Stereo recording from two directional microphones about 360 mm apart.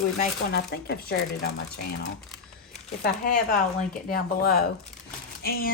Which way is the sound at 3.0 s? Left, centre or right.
Left.